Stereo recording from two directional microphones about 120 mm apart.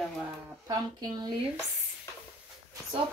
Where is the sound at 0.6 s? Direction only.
35° right (ahead or behind).